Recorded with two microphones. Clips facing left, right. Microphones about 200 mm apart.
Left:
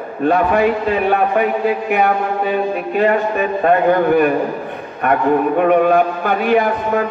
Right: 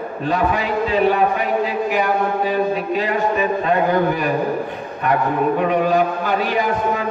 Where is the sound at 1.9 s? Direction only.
60° left (ahead or behind).